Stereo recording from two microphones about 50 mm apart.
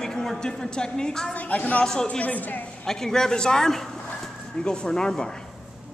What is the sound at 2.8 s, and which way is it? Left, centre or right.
A woman's voice, centre.